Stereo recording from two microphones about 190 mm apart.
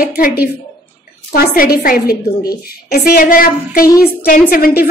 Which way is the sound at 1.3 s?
55° left (ahead or behind).